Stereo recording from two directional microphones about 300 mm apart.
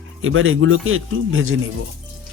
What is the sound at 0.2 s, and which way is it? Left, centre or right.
Speech, right.